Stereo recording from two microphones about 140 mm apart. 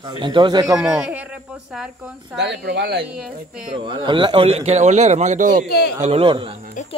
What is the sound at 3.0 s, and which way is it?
Speech, 10° right (ahead or behind).